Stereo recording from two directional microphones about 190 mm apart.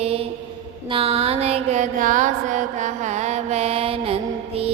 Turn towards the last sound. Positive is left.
turn(degrees=-30)  # may be behind; listen again after turning